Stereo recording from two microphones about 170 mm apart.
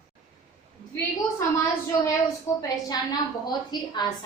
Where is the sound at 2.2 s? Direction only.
20° left (ahead or behind).